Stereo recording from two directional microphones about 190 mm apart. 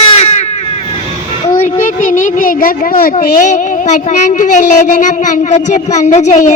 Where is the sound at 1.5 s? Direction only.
45° left (ahead or behind).